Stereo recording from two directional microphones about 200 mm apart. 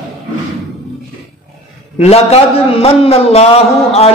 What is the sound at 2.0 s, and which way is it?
A man's voice, 30° left (ahead or behind).